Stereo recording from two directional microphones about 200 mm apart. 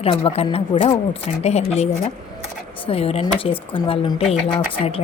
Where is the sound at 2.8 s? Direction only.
30° left (ahead or behind).